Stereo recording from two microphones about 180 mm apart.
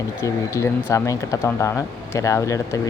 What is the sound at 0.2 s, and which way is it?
Speech, 15° left (ahead or behind).